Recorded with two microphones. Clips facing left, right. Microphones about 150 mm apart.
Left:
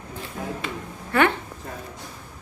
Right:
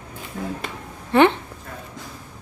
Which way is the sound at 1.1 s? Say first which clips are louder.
Right 5 dB; 20° right (ahead or behind).